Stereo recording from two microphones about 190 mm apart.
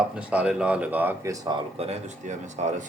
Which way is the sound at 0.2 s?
5° right (ahead or behind).